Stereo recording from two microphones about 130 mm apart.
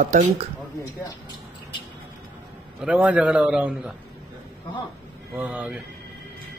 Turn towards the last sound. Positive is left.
turn(degrees=-10)  # may be behind; listen again after turning